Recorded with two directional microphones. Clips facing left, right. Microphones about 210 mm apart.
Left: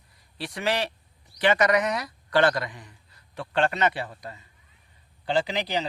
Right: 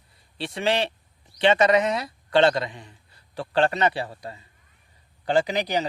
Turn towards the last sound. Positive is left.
turn(degrees=-45)  # may be behind; listen again after turning